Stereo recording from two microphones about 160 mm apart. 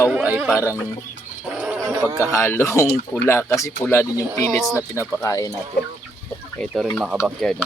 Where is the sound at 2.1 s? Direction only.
20° left (ahead or behind).